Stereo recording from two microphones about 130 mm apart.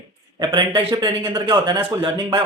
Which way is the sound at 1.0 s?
35° right (ahead or behind).